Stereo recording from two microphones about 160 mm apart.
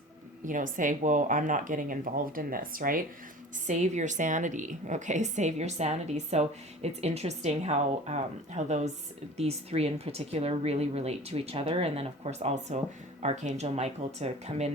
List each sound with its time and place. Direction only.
0.4 s speech: 55° right (ahead or behind)
3.7 s a woman's voice: 45° right (ahead or behind)